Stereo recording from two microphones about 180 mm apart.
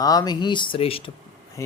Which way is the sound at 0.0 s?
20° left (ahead or behind).